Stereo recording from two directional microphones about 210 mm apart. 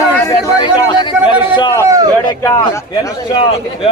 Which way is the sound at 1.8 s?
15° right (ahead or behind).